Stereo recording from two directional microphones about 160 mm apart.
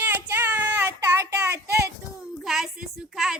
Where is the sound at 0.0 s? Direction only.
10° right (ahead or behind).